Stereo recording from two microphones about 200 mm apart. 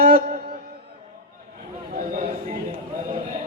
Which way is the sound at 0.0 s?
45° right (ahead or behind).